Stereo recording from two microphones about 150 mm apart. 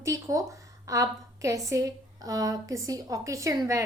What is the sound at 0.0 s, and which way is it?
A woman's voice, 20° right (ahead or behind).